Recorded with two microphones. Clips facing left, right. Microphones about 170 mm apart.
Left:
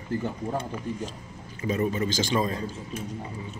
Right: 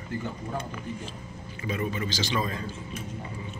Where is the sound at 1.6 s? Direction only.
40° left (ahead or behind).